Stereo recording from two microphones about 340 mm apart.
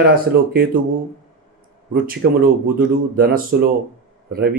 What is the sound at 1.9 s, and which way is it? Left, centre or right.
Speech, right.